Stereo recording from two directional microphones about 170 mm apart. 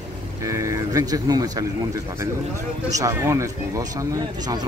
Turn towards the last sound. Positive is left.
turn(degrees=-20)  # may be behind; listen again after turning